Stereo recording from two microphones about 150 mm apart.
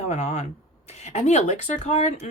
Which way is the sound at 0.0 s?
50° left (ahead or behind).